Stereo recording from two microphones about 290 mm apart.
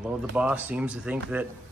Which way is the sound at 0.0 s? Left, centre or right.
Centre.